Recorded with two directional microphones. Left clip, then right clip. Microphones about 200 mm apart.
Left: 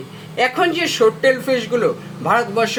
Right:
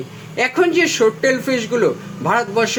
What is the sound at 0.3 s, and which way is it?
A man's voice, 50° right (ahead or behind).